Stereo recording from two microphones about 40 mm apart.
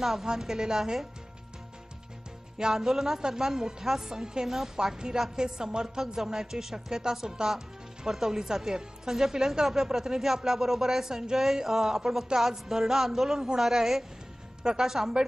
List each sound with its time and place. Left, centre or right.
0.0 s speech: centre
2.5 s speech: centre